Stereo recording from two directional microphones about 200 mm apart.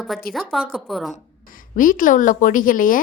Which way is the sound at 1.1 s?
40° left (ahead or behind).